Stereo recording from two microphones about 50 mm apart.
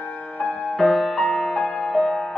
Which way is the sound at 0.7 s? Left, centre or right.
Centre.